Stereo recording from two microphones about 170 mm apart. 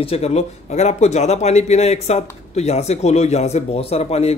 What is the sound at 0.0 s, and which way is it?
Speech, 35° left (ahead or behind).